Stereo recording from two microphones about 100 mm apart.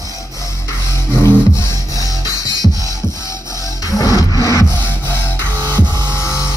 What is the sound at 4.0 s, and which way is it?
Music, 35° left (ahead or behind).